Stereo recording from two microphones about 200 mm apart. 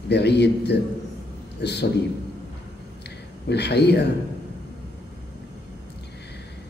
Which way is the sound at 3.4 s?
55° left (ahead or behind).